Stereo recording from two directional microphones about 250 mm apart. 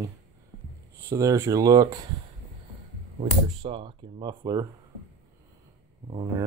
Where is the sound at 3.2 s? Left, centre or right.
Right.